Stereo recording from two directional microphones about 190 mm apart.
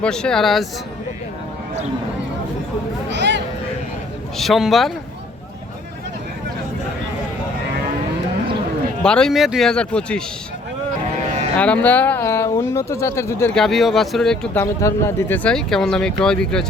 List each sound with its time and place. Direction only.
0.0 s speech: 5° left (ahead or behind)
3.1 s a sound: 65° right (ahead or behind)
4.4 s speech: centre (ahead or behind)
9.0 s speech: 5° left (ahead or behind)
11.5 s speech: 5° left (ahead or behind)
14.6 s speech: 15° left (ahead or behind)